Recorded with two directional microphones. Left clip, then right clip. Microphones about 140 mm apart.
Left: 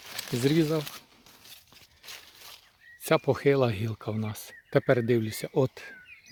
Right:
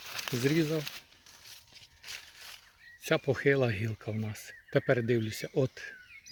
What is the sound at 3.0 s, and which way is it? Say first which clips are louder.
Speech: left 4 dB; 40° left (ahead or behind).